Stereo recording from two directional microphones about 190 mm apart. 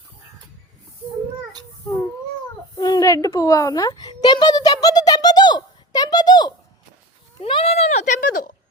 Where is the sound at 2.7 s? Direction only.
20° left (ahead or behind).